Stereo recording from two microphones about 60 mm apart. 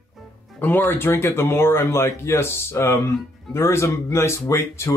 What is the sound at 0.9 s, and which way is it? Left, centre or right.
Speech, left.